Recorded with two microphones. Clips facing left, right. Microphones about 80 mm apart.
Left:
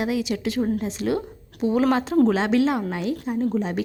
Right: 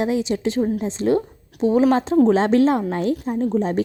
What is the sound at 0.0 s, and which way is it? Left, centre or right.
Speech, right.